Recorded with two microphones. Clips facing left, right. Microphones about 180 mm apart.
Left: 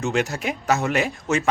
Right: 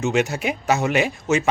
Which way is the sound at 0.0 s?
Centre (ahead or behind).